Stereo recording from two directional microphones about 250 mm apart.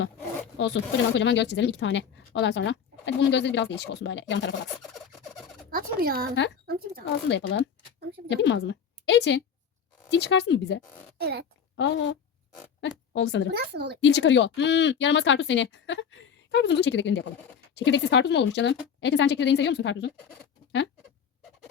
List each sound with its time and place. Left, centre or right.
0.6 s speech: left
4.8 s a sound: centre
5.7 s speech: right
7.3 s a woman's voice: left
11.2 s speech: right
11.8 s speech: left
13.5 s speech: right
14.0 s speech: left